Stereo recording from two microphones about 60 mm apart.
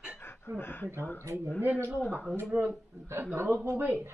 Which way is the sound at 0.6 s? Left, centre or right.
Left.